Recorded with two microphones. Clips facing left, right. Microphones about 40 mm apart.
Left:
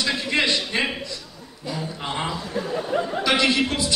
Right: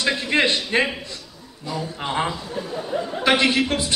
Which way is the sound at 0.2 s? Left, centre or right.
Right.